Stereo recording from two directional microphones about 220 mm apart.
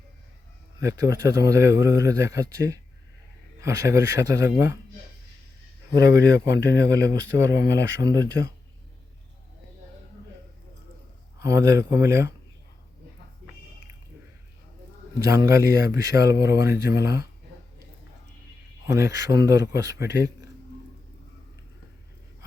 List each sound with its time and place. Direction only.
0.8 s speech: 15° right (ahead or behind)
5.9 s speech: 15° right (ahead or behind)
11.3 s speech: 15° right (ahead or behind)
15.3 s speech: 15° right (ahead or behind)
18.9 s speech: 15° right (ahead or behind)